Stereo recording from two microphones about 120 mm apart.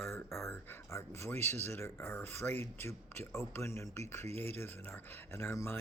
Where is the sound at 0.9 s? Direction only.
20° left (ahead or behind).